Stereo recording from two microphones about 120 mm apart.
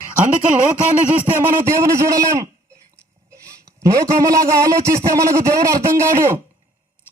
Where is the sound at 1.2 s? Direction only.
15° right (ahead or behind).